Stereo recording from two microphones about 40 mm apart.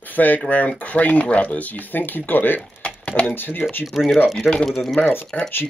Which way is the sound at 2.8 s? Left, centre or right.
Left.